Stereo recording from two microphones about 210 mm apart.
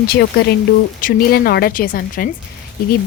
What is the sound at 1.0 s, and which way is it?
Speech, 45° left (ahead or behind).